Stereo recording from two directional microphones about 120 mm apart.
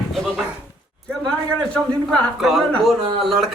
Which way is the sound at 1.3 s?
5° left (ahead or behind).